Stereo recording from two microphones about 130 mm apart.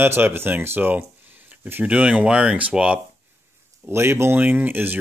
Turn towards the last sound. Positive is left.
turn(degrees=-15)  # may be behind; listen again after turning